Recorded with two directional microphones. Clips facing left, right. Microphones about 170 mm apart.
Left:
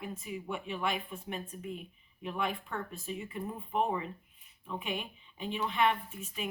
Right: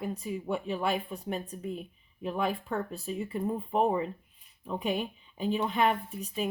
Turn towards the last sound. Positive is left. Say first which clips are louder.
# right 6 dB
turn(degrees=-40)  # may be behind; listen again after turning